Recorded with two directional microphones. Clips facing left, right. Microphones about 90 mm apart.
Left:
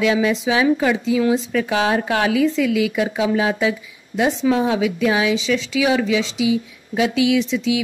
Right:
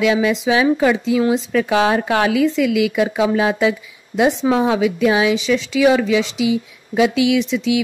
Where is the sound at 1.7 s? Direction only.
60° right (ahead or behind).